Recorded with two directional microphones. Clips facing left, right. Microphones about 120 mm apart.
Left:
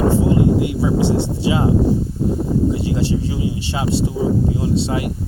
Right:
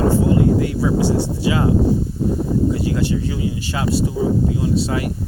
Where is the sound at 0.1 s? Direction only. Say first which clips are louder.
Even; 20° left (ahead or behind).